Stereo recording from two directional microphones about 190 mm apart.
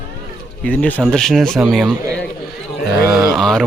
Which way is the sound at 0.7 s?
10° left (ahead or behind).